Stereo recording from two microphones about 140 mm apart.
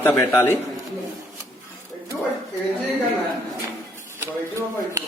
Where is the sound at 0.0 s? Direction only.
15° left (ahead or behind).